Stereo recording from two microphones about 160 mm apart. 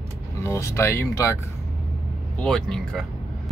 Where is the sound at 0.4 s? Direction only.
15° left (ahead or behind).